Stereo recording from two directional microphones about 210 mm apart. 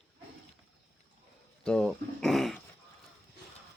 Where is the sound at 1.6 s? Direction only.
5° left (ahead or behind).